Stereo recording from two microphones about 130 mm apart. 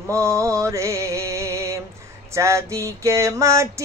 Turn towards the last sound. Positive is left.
turn(degrees=-25)  # may be behind; listen again after turning